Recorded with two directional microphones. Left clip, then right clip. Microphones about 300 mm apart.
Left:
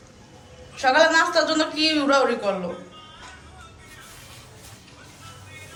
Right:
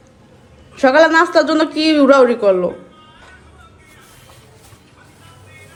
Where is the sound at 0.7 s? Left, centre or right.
Centre.